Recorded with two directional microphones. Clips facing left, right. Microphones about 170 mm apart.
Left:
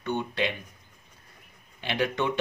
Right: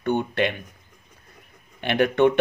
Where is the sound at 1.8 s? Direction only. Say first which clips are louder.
Right 9 dB; 60° right (ahead or behind).